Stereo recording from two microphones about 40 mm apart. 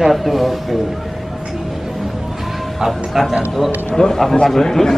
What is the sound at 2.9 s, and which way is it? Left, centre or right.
Speech, centre.